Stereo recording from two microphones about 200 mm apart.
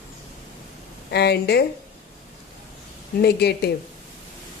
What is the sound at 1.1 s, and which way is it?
Speech, 55° left (ahead or behind).